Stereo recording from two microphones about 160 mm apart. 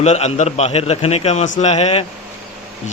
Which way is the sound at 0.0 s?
45° left (ahead or behind).